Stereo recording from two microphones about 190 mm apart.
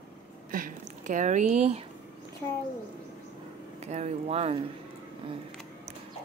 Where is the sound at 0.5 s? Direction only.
45° right (ahead or behind).